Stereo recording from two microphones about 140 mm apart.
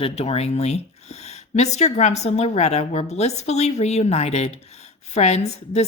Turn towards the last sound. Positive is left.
turn(degrees=50)  # may be behind; listen again after turning